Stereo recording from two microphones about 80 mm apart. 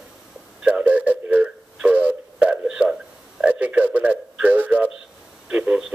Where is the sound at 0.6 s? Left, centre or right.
Centre.